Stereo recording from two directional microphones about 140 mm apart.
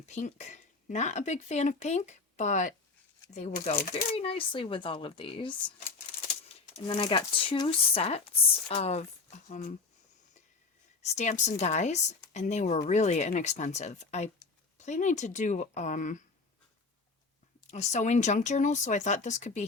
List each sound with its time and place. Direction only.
0.0 s speech: 55° left (ahead or behind)
3.3 s speech: 50° left (ahead or behind); by 5.7 s 35° left (ahead or behind)
6.8 s speech: 40° left (ahead or behind)
7.9 s speech: 45° left (ahead or behind)
11.0 s speech: 55° left (ahead or behind)
17.7 s speech: 55° left (ahead or behind)